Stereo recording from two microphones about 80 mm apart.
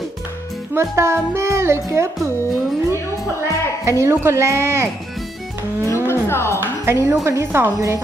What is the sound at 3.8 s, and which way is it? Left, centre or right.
Speech, right.